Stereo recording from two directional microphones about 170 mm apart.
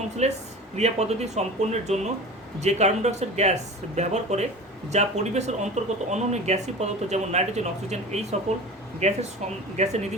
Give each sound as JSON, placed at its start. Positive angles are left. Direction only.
{"t": 0.2, "sound": "speech", "side_deg": -40}